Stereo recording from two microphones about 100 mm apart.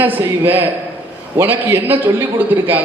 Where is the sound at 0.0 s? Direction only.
20° right (ahead or behind).